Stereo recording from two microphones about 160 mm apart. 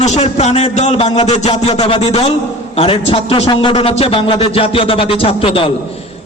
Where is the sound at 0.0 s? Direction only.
45° left (ahead or behind).